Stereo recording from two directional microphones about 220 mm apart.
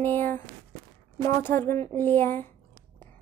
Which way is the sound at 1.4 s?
10° left (ahead or behind).